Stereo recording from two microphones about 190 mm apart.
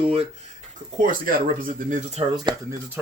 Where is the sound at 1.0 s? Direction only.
45° right (ahead or behind).